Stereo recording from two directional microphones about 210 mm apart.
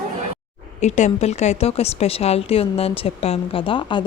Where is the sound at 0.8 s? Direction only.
35° left (ahead or behind).